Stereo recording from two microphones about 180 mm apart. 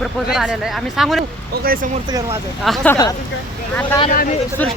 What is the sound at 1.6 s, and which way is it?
Speech, 55° right (ahead or behind).